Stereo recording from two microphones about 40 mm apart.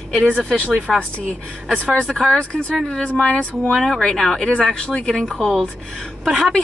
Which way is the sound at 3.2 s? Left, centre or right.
Left.